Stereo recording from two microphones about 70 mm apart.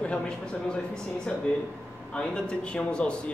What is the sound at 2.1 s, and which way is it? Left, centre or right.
A man's voice, centre.